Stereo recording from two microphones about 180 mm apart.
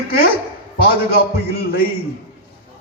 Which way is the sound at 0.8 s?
60° left (ahead or behind).